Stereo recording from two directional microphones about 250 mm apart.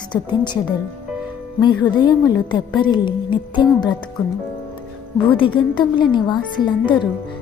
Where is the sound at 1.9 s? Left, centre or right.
Centre.